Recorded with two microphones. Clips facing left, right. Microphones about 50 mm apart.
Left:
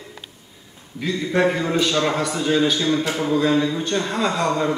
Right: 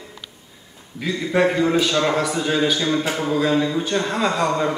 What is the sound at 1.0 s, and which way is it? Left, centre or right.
A man's voice, centre.